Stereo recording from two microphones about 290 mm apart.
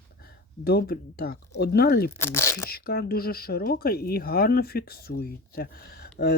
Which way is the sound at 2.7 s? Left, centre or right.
Left.